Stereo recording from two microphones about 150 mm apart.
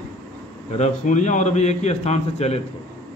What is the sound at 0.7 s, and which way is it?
A man's voice, 50° left (ahead or behind).